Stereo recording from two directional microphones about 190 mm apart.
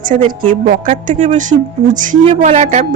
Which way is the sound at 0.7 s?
45° right (ahead or behind).